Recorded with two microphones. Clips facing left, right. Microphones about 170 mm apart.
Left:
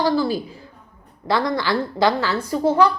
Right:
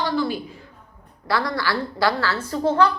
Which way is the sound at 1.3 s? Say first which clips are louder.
Left 3 dB; 20° left (ahead or behind).